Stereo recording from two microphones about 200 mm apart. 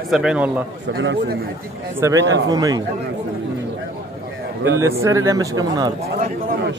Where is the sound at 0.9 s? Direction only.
65° right (ahead or behind).